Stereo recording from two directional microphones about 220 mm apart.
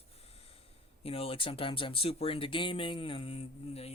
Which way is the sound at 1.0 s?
25° left (ahead or behind).